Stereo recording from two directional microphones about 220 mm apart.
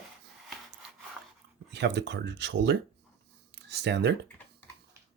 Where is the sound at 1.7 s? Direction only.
50° right (ahead or behind).